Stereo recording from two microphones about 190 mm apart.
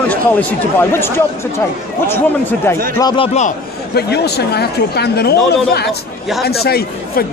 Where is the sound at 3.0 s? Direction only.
20° left (ahead or behind).